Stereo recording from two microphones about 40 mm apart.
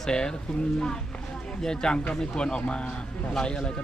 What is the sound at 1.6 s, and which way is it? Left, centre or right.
Speech, centre.